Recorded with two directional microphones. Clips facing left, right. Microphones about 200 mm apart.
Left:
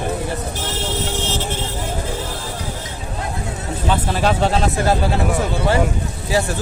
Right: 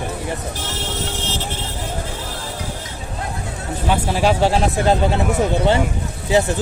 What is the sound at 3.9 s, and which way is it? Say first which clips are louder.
Speech: right 1 dB; 10° right (ahead or behind).